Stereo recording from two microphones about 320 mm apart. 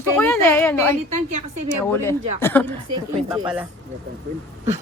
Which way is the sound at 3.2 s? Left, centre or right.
Centre.